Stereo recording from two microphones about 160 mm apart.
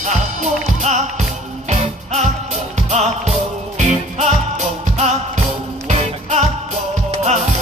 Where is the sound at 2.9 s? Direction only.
45° right (ahead or behind).